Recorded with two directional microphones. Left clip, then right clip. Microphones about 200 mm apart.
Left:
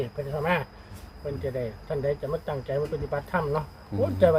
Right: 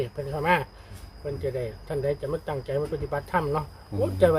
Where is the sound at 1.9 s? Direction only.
55° right (ahead or behind).